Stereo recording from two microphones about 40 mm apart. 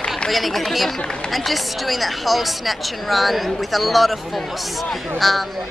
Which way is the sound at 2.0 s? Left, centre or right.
Centre.